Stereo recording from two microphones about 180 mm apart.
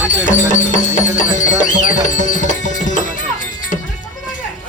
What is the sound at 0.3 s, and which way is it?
Music, 45° left (ahead or behind).